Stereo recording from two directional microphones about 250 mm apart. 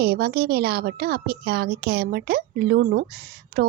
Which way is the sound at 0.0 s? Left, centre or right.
Right.